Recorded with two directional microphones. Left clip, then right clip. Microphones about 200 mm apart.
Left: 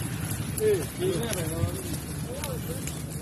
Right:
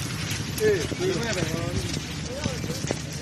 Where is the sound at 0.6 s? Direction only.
25° right (ahead or behind).